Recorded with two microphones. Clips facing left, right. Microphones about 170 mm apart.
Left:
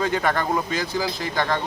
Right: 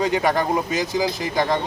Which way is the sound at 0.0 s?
15° right (ahead or behind).